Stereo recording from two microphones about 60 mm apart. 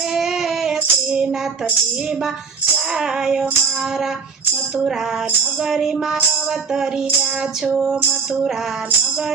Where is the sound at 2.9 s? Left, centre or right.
Centre.